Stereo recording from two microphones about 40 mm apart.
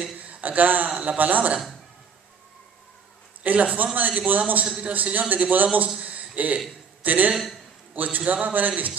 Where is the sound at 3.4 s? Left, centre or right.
Right.